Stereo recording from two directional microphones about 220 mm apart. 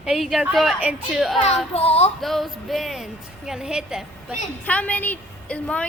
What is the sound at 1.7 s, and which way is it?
Child singing, 30° left (ahead or behind).